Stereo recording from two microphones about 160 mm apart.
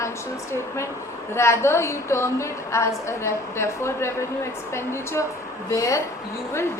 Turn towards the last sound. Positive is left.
turn(degrees=20)  # may be behind; listen again after turning